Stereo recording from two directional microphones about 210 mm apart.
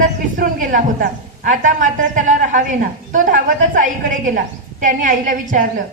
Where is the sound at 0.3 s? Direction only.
40° right (ahead or behind).